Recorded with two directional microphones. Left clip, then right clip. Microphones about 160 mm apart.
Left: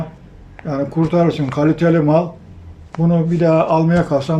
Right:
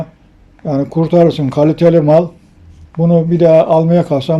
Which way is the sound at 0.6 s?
30° right (ahead or behind).